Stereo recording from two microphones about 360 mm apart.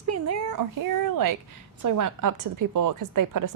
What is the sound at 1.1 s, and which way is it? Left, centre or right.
A woman's voice, right.